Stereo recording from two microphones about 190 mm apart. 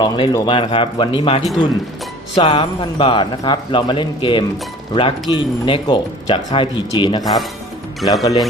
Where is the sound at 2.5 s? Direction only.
25° left (ahead or behind).